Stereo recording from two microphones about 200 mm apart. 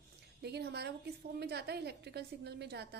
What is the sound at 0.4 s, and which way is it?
A woman's voice, 55° right (ahead or behind).